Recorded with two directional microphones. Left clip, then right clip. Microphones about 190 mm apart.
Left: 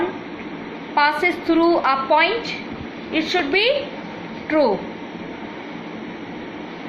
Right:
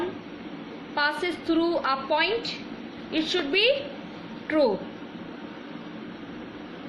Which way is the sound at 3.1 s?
45° right (ahead or behind).